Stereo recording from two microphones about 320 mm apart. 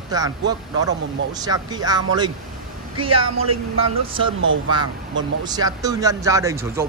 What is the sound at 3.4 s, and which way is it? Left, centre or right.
Speech, right.